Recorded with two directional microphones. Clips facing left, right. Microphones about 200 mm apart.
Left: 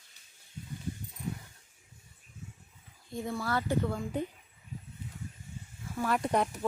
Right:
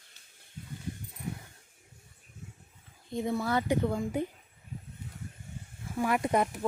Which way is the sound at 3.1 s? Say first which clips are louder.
Right 4 dB; 20° right (ahead or behind).